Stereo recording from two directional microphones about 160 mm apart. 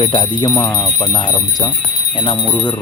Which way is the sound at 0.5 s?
20° left (ahead or behind).